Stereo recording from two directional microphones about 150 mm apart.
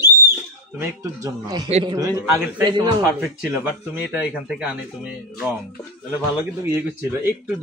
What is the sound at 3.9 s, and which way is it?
A man's voice, 10° right (ahead or behind).